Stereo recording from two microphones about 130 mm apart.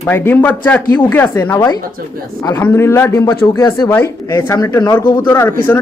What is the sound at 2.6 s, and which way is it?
Speech, 15° left (ahead or behind).